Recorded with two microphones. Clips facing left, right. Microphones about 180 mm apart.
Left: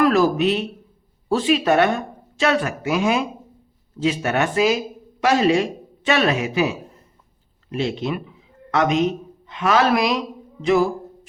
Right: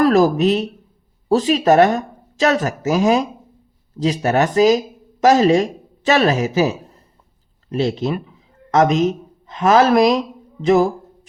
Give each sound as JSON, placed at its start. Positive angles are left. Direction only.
{"t": 0.0, "sound": "speech", "side_deg": -40}